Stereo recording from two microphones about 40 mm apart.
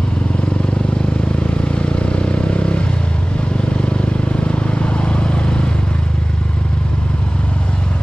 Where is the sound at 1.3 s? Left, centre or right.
Left.